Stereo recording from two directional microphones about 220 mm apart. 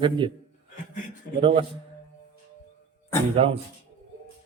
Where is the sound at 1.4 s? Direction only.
25° right (ahead or behind).